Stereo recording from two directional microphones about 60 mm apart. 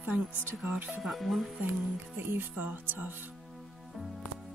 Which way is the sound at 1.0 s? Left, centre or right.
Centre.